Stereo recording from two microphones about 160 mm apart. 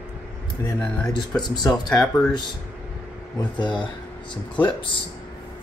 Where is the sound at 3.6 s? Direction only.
30° left (ahead or behind).